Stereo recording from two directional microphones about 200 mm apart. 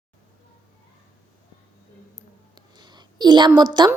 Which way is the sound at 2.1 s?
20° right (ahead or behind).